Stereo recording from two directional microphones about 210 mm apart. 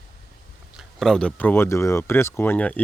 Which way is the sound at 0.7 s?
Centre (ahead or behind).